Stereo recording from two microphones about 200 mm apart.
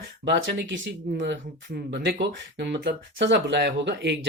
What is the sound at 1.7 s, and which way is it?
Speech, 55° right (ahead or behind).